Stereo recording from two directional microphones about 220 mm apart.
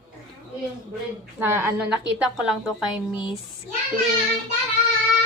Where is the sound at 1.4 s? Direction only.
10° right (ahead or behind).